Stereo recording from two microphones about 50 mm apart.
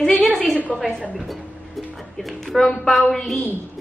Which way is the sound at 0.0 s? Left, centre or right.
Centre.